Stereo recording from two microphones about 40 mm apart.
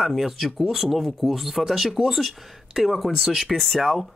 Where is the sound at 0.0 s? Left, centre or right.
Centre.